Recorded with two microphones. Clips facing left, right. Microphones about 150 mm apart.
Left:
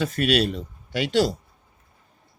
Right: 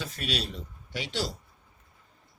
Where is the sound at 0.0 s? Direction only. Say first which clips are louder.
Left 12 dB; 65° left (ahead or behind).